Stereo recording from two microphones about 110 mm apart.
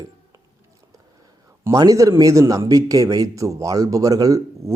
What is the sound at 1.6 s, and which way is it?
A man's voice, 30° right (ahead or behind).